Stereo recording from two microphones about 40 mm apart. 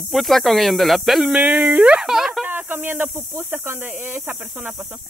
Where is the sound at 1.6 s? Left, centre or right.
Right.